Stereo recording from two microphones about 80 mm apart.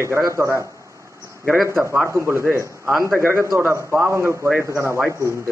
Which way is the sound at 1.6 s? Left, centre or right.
Right.